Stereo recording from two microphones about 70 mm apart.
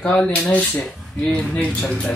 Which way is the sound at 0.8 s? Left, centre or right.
Centre.